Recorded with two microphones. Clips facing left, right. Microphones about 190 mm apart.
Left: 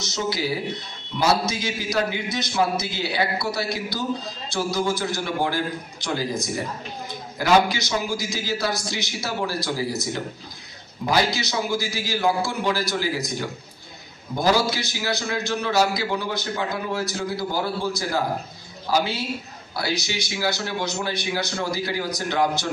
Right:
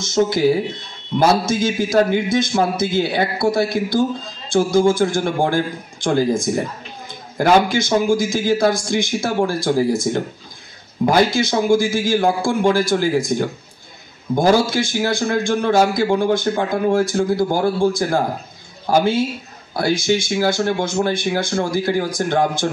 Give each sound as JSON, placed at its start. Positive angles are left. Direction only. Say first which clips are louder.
{"t": 0.0, "sound": "a man's voice", "louder": "right 10 dB", "side_deg": -50}